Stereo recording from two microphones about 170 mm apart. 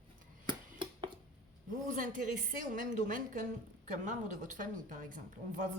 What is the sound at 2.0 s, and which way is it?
Speech, 50° right (ahead or behind).